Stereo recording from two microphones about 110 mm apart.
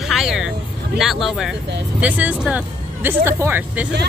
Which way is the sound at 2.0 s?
10° right (ahead or behind).